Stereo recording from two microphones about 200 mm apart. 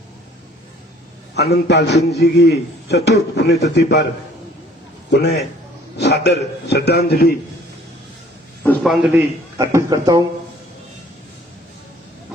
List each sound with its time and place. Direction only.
1.4 s a man's voice: 55° left (ahead or behind)
6.0 s a man's voice: 60° left (ahead or behind)
8.8 s a man's voice: centre (ahead or behind)
9.6 s a man's voice: 15° right (ahead or behind)